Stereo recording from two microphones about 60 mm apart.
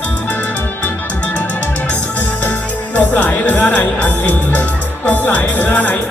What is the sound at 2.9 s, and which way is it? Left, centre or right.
Music, left.